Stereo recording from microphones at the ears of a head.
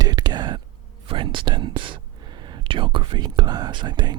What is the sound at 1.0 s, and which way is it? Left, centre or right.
Whispering, right.